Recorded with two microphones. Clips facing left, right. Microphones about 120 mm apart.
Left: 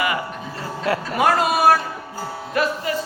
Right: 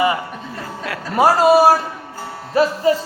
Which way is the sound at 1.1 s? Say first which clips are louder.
Right 8 dB; 35° right (ahead or behind).